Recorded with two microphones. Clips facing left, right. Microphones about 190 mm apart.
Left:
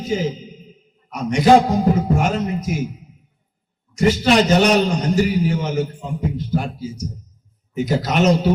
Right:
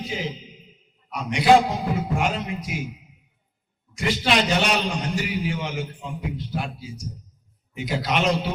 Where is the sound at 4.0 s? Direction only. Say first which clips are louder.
Left 7 dB; 40° left (ahead or behind).